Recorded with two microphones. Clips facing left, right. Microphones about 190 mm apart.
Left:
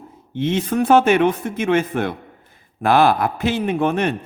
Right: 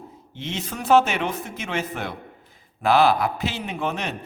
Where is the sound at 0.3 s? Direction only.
55° left (ahead or behind).